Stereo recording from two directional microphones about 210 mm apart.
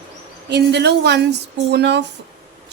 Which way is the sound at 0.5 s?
55° right (ahead or behind).